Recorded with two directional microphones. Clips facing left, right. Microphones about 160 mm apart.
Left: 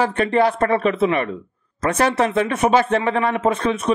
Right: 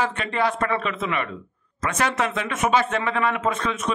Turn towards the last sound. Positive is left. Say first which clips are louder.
# left 5 dB
turn(degrees=30)  # may be behind; listen again after turning